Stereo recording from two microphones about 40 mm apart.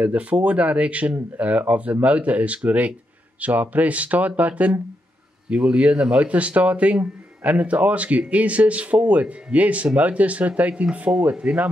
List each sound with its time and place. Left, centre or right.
0.0 s speech: right
5.5 s speech: right